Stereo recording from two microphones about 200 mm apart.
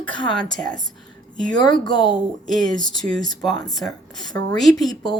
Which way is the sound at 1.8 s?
20° left (ahead or behind).